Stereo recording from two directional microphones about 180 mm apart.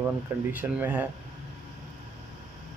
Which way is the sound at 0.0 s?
10° right (ahead or behind).